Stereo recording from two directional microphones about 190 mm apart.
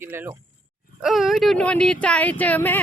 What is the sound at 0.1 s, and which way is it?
Speech, 10° right (ahead or behind).